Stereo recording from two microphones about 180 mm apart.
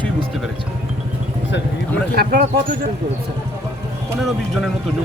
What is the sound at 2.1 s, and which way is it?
Speech, 60° right (ahead or behind).